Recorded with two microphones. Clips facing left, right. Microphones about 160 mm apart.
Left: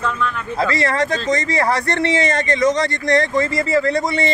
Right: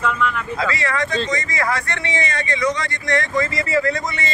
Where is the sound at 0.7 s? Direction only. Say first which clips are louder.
Left 3 dB; 35° left (ahead or behind).